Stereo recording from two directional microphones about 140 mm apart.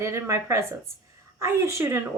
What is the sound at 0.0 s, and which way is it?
Speech, 20° right (ahead or behind).